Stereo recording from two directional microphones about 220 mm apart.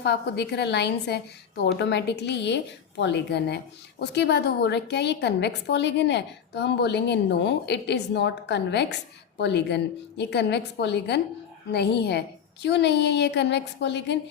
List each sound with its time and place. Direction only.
0.0 s a woman's voice: 50° left (ahead or behind)